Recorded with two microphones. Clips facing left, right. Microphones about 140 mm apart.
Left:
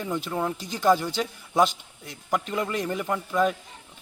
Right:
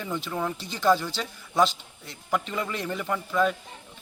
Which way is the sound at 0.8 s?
15° left (ahead or behind).